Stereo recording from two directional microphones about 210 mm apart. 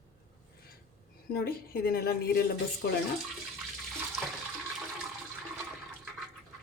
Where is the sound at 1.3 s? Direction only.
45° left (ahead or behind).